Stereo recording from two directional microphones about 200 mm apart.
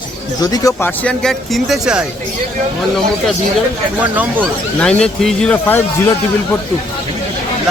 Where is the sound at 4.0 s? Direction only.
10° right (ahead or behind).